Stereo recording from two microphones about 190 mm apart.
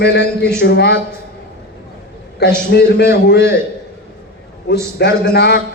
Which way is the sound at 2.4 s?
60° left (ahead or behind).